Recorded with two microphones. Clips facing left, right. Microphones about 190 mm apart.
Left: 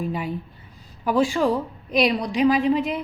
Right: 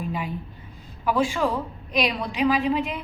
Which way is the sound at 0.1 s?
40° left (ahead or behind).